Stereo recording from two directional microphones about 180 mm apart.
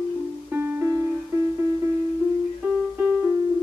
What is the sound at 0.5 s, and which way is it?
Music, 10° right (ahead or behind).